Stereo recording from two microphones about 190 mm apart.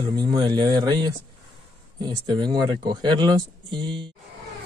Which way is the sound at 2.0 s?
25° right (ahead or behind).